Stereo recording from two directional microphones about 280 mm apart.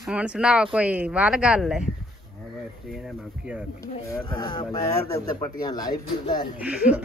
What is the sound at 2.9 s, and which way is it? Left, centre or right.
Speech, centre.